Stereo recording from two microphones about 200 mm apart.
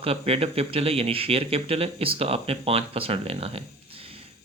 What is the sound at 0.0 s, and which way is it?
Speech, 30° right (ahead or behind).